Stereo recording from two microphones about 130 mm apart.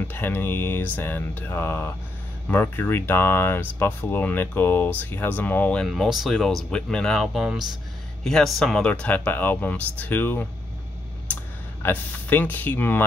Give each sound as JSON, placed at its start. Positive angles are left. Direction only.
{"t": 0.1, "sound": "speech", "side_deg": 15}
{"t": 5.9, "sound": "speech", "side_deg": 0}
{"t": 11.8, "sound": "speech", "side_deg": 15}